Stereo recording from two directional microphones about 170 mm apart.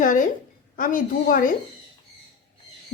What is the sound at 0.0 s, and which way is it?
A woman's voice, 50° left (ahead or behind).